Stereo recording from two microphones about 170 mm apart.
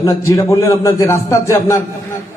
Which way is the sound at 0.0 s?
20° left (ahead or behind).